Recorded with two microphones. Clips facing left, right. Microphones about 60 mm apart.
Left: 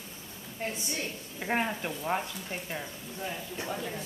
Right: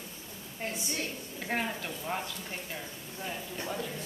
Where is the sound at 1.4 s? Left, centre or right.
Centre.